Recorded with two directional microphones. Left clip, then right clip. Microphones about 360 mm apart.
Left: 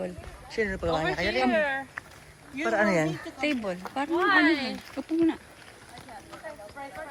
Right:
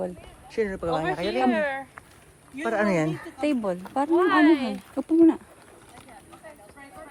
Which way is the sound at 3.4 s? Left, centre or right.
Centre.